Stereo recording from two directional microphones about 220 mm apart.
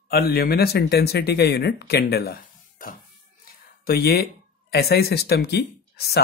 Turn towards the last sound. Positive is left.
turn(degrees=45)  # may be behind; listen again after turning